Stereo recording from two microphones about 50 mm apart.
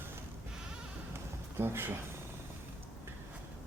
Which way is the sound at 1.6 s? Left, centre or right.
Right.